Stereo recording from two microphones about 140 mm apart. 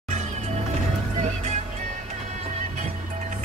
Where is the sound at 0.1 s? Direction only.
55° right (ahead or behind).